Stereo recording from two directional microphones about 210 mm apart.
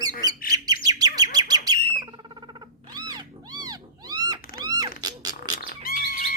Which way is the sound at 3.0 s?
20° right (ahead or behind).